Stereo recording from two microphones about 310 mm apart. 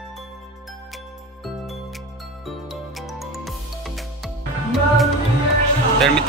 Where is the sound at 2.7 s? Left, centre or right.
Centre.